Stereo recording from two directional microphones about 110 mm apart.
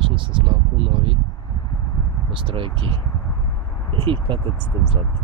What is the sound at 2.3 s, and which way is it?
Speech, 50° right (ahead or behind).